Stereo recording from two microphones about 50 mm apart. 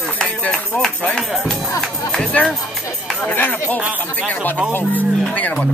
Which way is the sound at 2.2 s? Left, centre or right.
Left.